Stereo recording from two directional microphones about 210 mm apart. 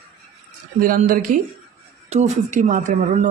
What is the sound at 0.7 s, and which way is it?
Speech, 40° right (ahead or behind).